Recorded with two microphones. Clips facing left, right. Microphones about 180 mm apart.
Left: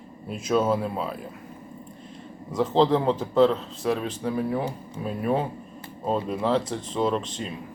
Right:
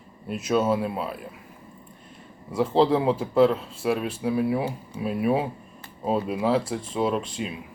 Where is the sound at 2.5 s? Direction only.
5° right (ahead or behind).